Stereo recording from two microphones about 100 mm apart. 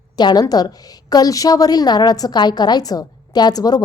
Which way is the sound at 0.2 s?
45° left (ahead or behind).